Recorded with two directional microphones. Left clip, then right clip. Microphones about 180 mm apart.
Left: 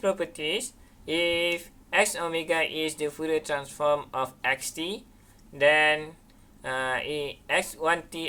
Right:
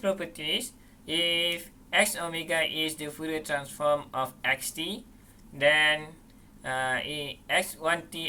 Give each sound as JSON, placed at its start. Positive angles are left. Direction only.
{"t": 0.0, "sound": "speech", "side_deg": 40}